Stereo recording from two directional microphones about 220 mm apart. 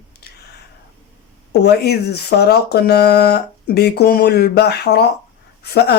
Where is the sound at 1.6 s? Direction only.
45° left (ahead or behind).